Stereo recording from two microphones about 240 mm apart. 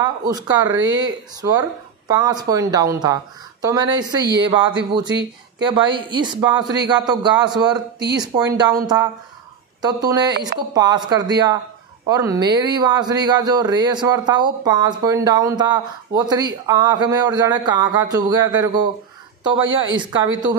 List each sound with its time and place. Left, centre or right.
0.0 s speech: centre